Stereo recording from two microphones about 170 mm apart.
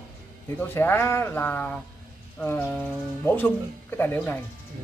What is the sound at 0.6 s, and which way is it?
Speech, 15° left (ahead or behind).